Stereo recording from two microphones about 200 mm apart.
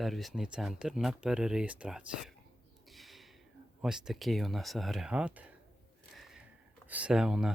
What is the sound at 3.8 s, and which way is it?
Speech, 5° right (ahead or behind).